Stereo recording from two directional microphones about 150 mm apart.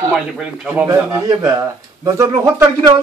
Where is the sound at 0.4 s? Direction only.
10° right (ahead or behind).